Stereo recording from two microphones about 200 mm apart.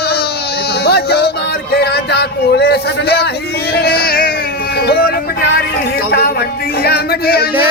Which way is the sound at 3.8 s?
50° left (ahead or behind).